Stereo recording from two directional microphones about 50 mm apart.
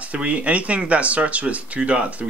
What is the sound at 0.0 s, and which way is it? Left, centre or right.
Speech, right.